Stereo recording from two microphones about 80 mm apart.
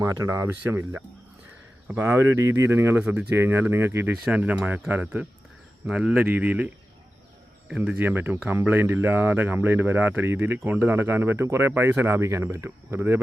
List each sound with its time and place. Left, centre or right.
0.0 s speech: right
4.3 s speech: centre
5.9 s speech: centre
6.2 s speech: right
7.9 s speech: right